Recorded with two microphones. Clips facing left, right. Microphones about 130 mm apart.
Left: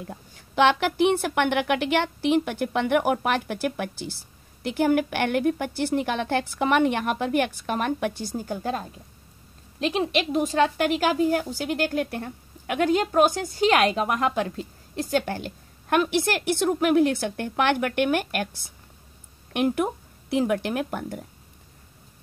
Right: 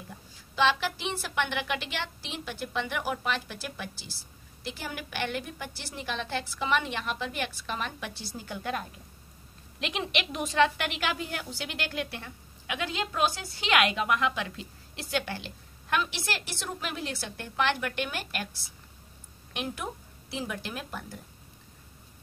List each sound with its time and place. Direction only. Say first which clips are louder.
0.0 s a woman's voice: left 8 dB; 60° left (ahead or behind)